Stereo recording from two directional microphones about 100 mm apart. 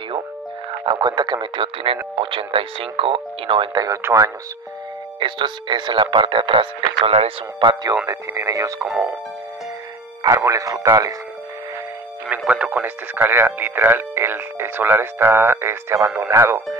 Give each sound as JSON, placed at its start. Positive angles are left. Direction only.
{"t": 0.8, "sound": "speech", "side_deg": -45}
{"t": 3.8, "sound": "speech", "side_deg": -30}
{"t": 5.2, "sound": "speech", "side_deg": -50}
{"t": 7.1, "sound": "speech", "side_deg": -75}
{"t": 7.6, "sound": "speech", "side_deg": -40}
{"t": 8.8, "sound": "speech", "side_deg": 0}
{"t": 10.2, "sound": "speech", "side_deg": -30}
{"t": 12.3, "sound": "speech", "side_deg": -10}